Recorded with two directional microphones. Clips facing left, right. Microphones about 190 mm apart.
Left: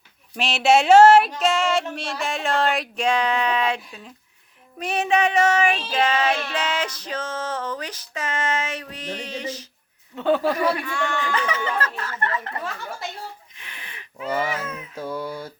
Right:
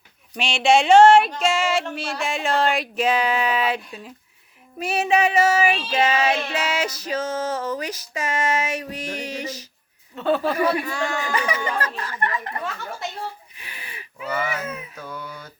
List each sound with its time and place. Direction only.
0.3 s music: centre (ahead or behind)
4.8 s child singing: 5° right (ahead or behind)
10.2 s speech: 15° left (ahead or behind)
10.5 s music: 5° right (ahead or behind)
10.8 s speech: 35° right (ahead or behind)
11.2 s child singing: 10° right (ahead or behind)
13.6 s a sound: 5° right (ahead or behind)
14.9 s a sound: 30° left (ahead or behind)